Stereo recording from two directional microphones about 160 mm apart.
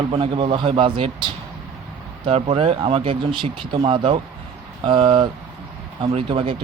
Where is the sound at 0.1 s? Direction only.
35° right (ahead or behind).